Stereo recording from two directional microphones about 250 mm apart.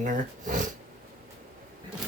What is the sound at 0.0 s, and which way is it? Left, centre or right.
Speech, right.